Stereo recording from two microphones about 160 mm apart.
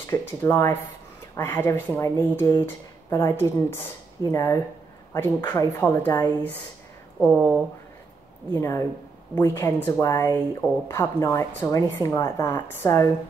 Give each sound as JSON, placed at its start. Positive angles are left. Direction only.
{"t": 0.0, "sound": "a woman's voice", "side_deg": 15}
{"t": 7.2, "sound": "speech", "side_deg": -5}
{"t": 8.5, "sound": "a woman's voice", "side_deg": 15}